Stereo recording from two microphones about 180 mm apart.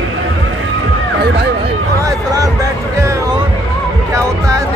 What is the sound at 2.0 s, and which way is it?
Music, 20° right (ahead or behind).